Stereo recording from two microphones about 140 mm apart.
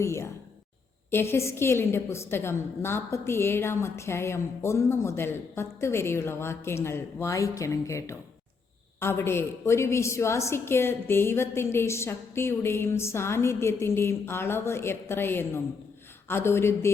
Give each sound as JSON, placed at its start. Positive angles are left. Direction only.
{"t": 0.0, "sound": "a woman's voice", "side_deg": 20}